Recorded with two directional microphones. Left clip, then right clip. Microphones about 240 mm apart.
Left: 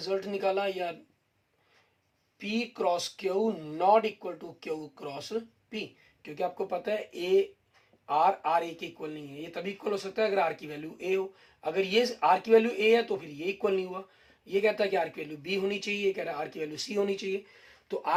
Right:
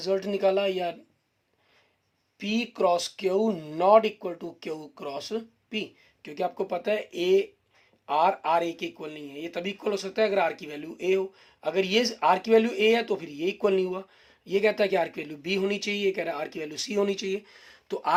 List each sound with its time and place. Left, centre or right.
0.0 s speech: right
2.4 s speech: right